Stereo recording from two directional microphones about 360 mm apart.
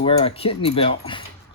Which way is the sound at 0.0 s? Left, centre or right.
Centre.